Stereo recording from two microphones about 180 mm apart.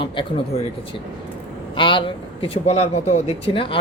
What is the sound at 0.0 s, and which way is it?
Speech, 25° left (ahead or behind).